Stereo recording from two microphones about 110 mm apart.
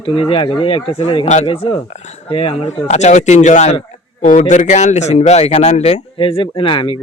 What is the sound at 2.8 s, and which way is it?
Speech, 90° left.